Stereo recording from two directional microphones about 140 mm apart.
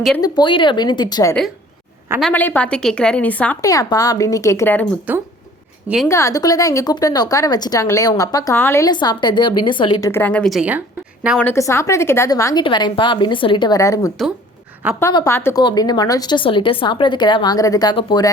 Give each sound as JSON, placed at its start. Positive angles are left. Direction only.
{"t": 0.2, "sound": "a woman's voice", "side_deg": 35}
{"t": 2.3, "sound": "a woman's voice", "side_deg": 15}
{"t": 3.6, "sound": "speech", "side_deg": 25}
{"t": 5.1, "sound": "speech", "side_deg": -10}
{"t": 6.1, "sound": "a woman's voice", "side_deg": 20}
{"t": 8.9, "sound": "a woman's voice", "side_deg": 30}
{"t": 10.0, "sound": "a woman's voice", "side_deg": 15}
{"t": 10.6, "sound": "a woman's voice", "side_deg": -10}
{"t": 11.5, "sound": "speech", "side_deg": 20}
{"t": 12.6, "sound": "a woman's voice", "side_deg": 35}
{"t": 14.8, "sound": "speech", "side_deg": -10}
{"t": 15.3, "sound": "a woman's voice", "side_deg": 15}
{"t": 15.5, "sound": "a woman's voice", "side_deg": 30}